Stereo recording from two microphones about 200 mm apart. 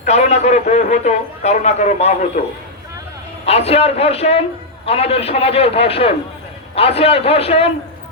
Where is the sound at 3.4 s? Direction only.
30° left (ahead or behind).